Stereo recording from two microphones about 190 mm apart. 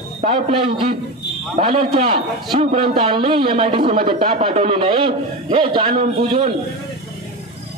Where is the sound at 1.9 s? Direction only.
30° right (ahead or behind).